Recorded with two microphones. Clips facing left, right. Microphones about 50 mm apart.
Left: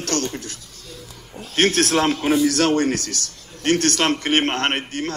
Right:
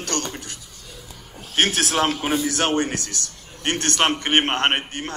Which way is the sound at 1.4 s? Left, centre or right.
Centre.